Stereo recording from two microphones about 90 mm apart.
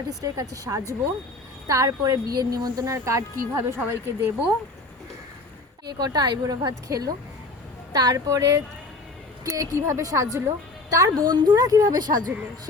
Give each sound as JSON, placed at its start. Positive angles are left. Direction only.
{"t": 0.1, "sound": "speech", "side_deg": -40}
{"t": 6.1, "sound": "a woman's voice", "side_deg": -45}